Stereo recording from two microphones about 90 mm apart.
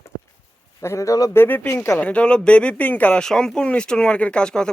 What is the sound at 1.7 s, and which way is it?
Speech, 35° left (ahead or behind).